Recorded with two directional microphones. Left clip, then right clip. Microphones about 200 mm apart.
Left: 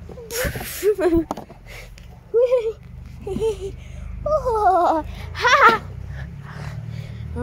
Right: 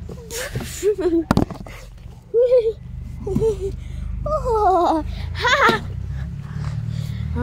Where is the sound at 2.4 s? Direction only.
10° left (ahead or behind).